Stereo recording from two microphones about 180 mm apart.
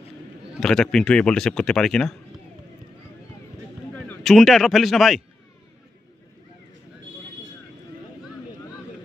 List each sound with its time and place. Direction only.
0.6 s speech: 5° left (ahead or behind)
3.9 s speech: 5° left (ahead or behind)